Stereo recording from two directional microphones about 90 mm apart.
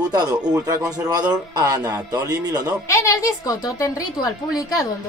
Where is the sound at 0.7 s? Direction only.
45° right (ahead or behind).